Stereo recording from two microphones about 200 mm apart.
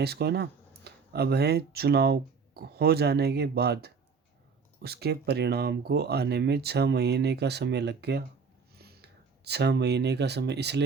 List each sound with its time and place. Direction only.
0.0 s speech: 55° right (ahead or behind)